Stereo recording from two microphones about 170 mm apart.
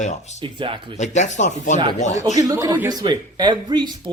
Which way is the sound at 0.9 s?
45° left (ahead or behind).